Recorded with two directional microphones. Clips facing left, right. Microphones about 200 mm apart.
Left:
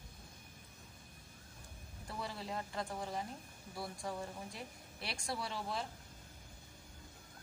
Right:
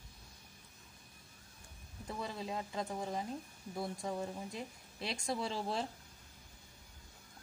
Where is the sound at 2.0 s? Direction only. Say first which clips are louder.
Right 3 dB; 20° right (ahead or behind).